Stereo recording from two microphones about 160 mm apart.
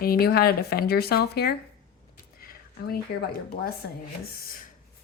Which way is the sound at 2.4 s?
70° left (ahead or behind).